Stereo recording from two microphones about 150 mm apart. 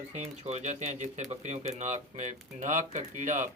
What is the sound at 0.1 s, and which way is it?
Speech, 45° right (ahead or behind).